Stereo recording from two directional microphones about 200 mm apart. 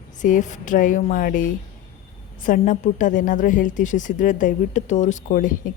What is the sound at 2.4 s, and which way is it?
A woman's voice, 40° left (ahead or behind).